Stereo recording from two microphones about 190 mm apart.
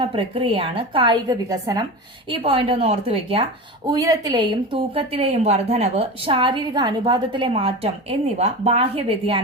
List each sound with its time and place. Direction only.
0.0 s a woman's voice: 30° right (ahead or behind)
3.8 s a woman's voice: 20° right (ahead or behind)